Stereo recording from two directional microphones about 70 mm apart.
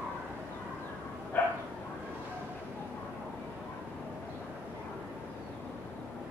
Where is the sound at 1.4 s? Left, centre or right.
Left.